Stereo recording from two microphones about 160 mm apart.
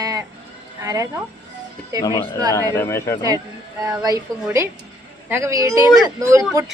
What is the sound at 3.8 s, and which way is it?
A woman's voice, 25° right (ahead or behind).